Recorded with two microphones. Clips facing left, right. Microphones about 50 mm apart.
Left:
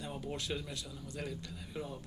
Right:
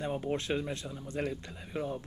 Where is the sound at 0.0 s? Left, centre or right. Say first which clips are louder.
Right 8 dB; right.